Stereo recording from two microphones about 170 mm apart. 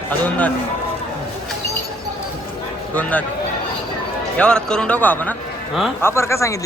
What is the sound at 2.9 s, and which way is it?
Speech, 10° left (ahead or behind).